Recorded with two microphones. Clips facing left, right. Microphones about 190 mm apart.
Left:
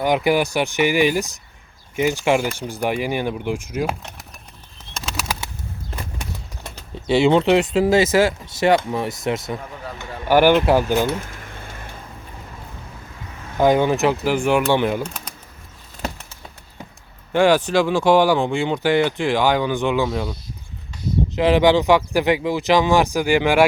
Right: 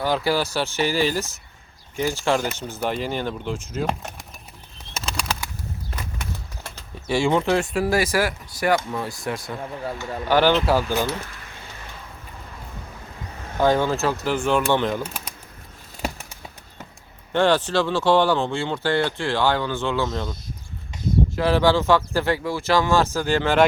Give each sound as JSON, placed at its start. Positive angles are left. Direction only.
{"t": 0.0, "sound": "speech", "side_deg": 15}
{"t": 4.9, "sound": "bird flight", "side_deg": 0}
{"t": 6.1, "sound": "speech", "side_deg": 20}
{"t": 11.0, "sound": "a sound", "side_deg": 50}
{"t": 13.6, "sound": "speech", "side_deg": 15}
{"t": 15.0, "sound": "speech", "side_deg": -5}
{"t": 17.3, "sound": "speech", "side_deg": 10}
{"t": 21.3, "sound": "speech", "side_deg": 15}